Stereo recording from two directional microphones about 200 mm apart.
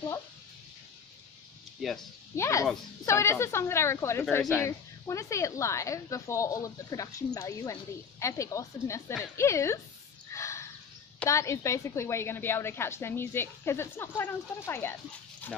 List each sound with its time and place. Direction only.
1.8 s speech: centre (ahead or behind)
2.3 s a woman's voice: 15° left (ahead or behind)
10.3 s a sound: 15° left (ahead or behind)
11.1 s a woman's voice: 15° left (ahead or behind)